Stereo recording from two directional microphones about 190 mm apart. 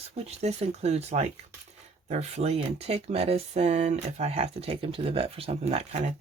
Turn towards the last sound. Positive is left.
turn(degrees=-35)  # may be behind; listen again after turning